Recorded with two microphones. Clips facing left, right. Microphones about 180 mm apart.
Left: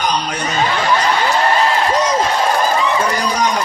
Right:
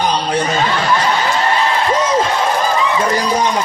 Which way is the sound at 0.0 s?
30° right (ahead or behind).